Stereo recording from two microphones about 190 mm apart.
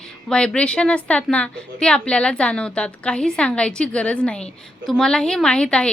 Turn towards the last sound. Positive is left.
turn(degrees=5)  # may be behind; listen again after turning